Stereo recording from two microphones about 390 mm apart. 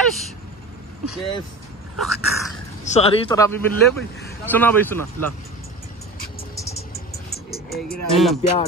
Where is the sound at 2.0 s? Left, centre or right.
Centre.